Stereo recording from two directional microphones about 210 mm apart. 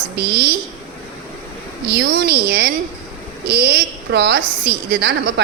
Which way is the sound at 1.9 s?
50° right (ahead or behind).